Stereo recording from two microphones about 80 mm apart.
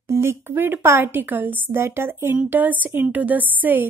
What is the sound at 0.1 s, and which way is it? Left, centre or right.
A woman's voice, right.